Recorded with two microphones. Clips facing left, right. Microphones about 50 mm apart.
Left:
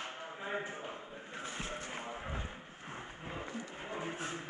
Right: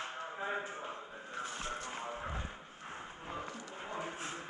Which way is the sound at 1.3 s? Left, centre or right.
Left.